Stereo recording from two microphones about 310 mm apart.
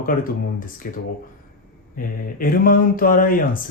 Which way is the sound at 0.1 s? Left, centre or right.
Left.